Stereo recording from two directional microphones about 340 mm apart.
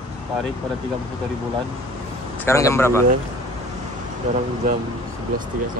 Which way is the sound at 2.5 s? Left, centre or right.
Centre.